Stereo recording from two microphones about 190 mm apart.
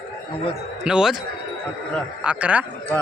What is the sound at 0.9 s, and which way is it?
Speech, 5° right (ahead or behind).